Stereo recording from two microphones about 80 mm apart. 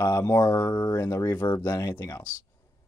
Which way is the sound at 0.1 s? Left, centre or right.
Left.